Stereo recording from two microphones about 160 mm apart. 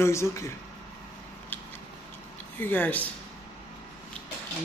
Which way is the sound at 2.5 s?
10° left (ahead or behind).